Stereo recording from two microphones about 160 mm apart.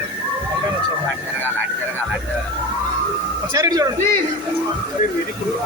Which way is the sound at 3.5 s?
20° right (ahead or behind).